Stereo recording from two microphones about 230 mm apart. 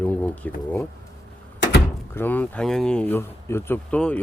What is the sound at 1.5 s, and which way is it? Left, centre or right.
Door, left.